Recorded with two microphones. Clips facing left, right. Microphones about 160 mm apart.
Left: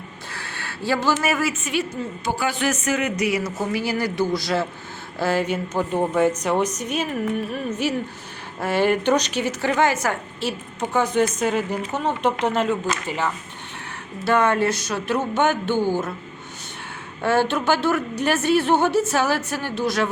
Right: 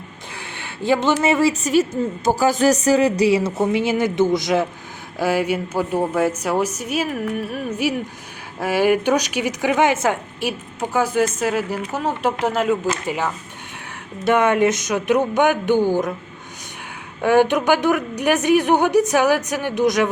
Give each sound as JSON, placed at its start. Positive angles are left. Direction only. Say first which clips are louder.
{"t": 0.3, "sound": "a sound", "louder": "right 2 dB", "side_deg": -20}
{"t": 1.2, "sound": "a woman's voice", "louder": "right 6 dB", "side_deg": -25}
{"t": 10.4, "sound": "a woman's voice", "louder": "right 1 dB", "side_deg": -5}
{"t": 17.2, "sound": "a woman's voice", "louder": "right 5 dB", "side_deg": -15}